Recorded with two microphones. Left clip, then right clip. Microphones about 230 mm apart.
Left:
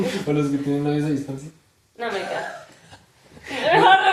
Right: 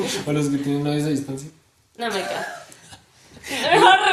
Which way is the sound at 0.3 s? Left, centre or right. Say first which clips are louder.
Left 2 dB; right.